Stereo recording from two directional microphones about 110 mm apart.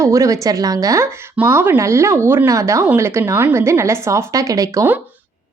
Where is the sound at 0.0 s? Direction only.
30° right (ahead or behind).